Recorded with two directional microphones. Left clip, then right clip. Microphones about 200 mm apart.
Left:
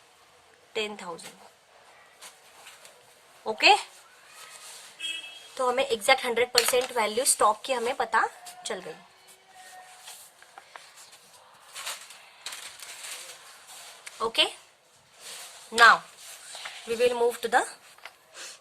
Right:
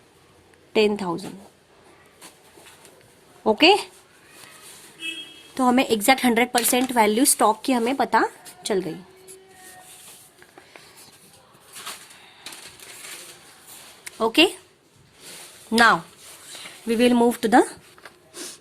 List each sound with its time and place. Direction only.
0.7 s speech: 30° right (ahead or behind)
3.4 s speech: 30° right (ahead or behind)
5.5 s speech: 40° right (ahead or behind)
14.0 s a sound: 40° right (ahead or behind)
15.7 s speech: 35° right (ahead or behind)
16.5 s a sound: centre (ahead or behind)
16.9 s speech: 40° right (ahead or behind)